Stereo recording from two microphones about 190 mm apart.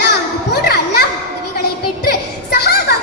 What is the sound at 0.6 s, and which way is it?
Children playing, 55° left (ahead or behind).